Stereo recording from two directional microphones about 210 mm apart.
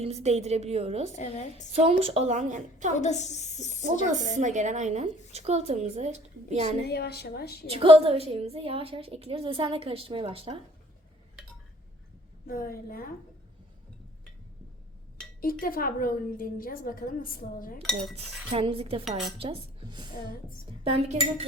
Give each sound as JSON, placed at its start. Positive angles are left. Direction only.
{"t": 0.0, "sound": "a woman's voice", "side_deg": -30}
{"t": 1.1, "sound": "a woman's voice", "side_deg": 30}
{"t": 1.7, "sound": "a woman's voice", "side_deg": -30}
{"t": 3.0, "sound": "a woman's voice", "side_deg": 35}
{"t": 4.4, "sound": "a woman's voice", "side_deg": -35}
{"t": 6.8, "sound": "a woman's voice", "side_deg": 50}
{"t": 7.7, "sound": "a woman's voice", "side_deg": -25}
{"t": 12.5, "sound": "a woman's voice", "side_deg": 40}
{"t": 15.4, "sound": "a woman's voice", "side_deg": 45}
{"t": 18.2, "sound": "a woman's voice", "side_deg": -25}
{"t": 19.0, "sound": "cutlery", "side_deg": 0}
{"t": 19.4, "sound": "a woman's voice", "side_deg": -25}